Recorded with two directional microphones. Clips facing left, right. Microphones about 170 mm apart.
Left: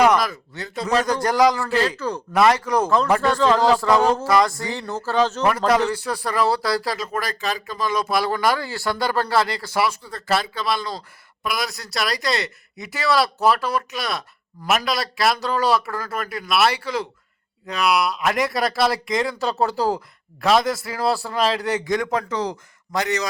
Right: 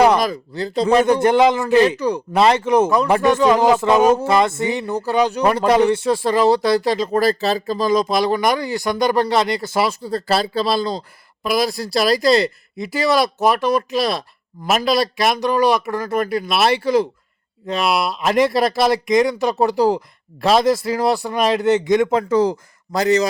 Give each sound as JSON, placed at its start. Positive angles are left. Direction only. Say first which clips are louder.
{"t": 0.0, "sound": "speech", "louder": "right 3 dB", "side_deg": -30}
{"t": 2.3, "sound": "speech", "louder": "right 3 dB", "side_deg": -25}
{"t": 5.5, "sound": "speech", "louder": "right 4 dB", "side_deg": -25}
{"t": 8.0, "sound": "speech", "louder": "right 3 dB", "side_deg": -20}